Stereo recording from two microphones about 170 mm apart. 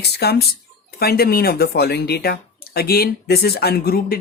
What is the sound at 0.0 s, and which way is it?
Speech, 70° left (ahead or behind).